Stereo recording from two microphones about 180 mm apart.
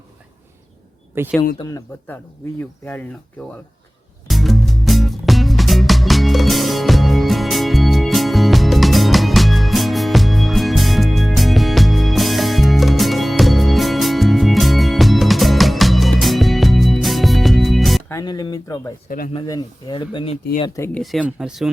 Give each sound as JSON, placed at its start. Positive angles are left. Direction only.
{"t": 1.2, "sound": "speech", "side_deg": -10}
{"t": 1.5, "sound": "speech", "side_deg": 20}
{"t": 4.3, "sound": "music", "side_deg": 0}
{"t": 18.1, "sound": "a sound", "side_deg": 20}
{"t": 19.3, "sound": "speech", "side_deg": 25}
{"t": 20.7, "sound": "speech", "side_deg": 15}
{"t": 21.0, "sound": "speech", "side_deg": 0}